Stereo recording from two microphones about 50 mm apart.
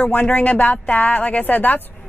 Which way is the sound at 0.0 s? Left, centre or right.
Left.